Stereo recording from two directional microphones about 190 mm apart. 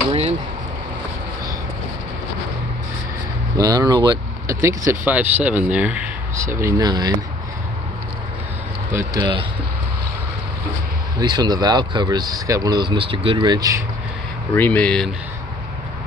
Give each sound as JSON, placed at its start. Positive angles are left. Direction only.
{"t": 3.5, "sound": "speech", "side_deg": -20}
{"t": 8.9, "sound": "speech", "side_deg": -25}
{"t": 11.1, "sound": "speech", "side_deg": -20}
{"t": 14.5, "sound": "speech", "side_deg": 10}